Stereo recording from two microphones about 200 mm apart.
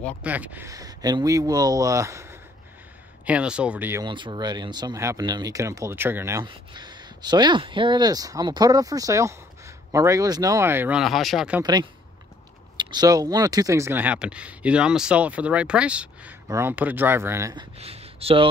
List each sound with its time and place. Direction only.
0.2 s speech: 10° right (ahead or behind)
4.0 s speech: 25° right (ahead or behind)
6.4 s speech: 20° right (ahead or behind); by 11.6 s 5° right (ahead or behind)
12.7 s speech: 20° right (ahead or behind)
17.7 s speech: 30° right (ahead or behind)